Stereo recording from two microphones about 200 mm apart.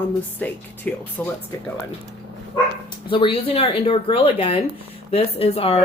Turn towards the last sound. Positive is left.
turn(degrees=30)  # may be behind; listen again after turning